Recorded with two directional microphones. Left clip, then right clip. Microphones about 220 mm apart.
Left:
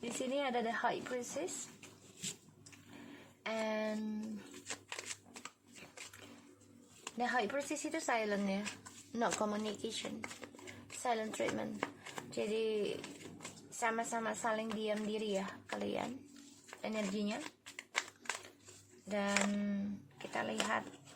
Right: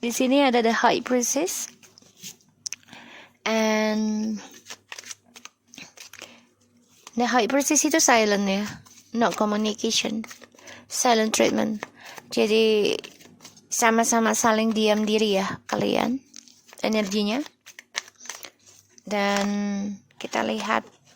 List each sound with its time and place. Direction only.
0.2 s a woman's voice: 50° right (ahead or behind)
3.4 s a woman's voice: 50° right (ahead or behind)
4.9 s shuffling cards: 15° right (ahead or behind)
7.2 s a woman's voice: 50° right (ahead or behind)
19.0 s a woman's voice: 50° right (ahead or behind)